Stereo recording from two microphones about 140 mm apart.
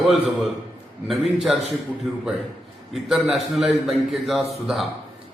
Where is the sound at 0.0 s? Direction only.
Centre (ahead or behind).